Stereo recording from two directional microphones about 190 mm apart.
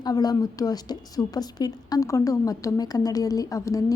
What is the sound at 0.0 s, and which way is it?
A woman's voice, 20° left (ahead or behind).